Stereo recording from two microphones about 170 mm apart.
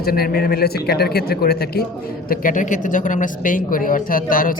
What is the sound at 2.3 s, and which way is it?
Speech, 50° left (ahead or behind).